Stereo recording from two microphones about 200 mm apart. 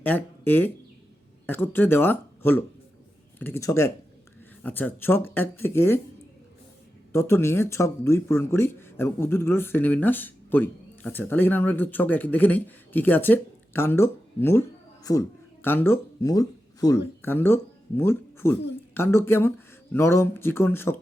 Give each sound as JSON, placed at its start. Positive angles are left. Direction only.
{"t": 0.0, "sound": "speech", "side_deg": 10}
{"t": 7.1, "sound": "speech", "side_deg": 15}